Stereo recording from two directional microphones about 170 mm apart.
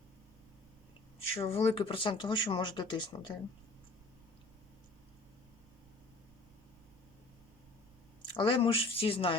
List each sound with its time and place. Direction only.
1.4 s speech: 35° left (ahead or behind)
8.2 s speech: 30° left (ahead or behind)